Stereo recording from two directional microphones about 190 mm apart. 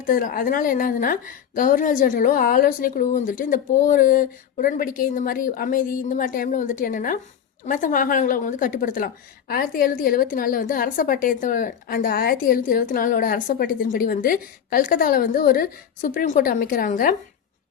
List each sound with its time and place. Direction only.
0.0 s a woman's voice: 45° left (ahead or behind)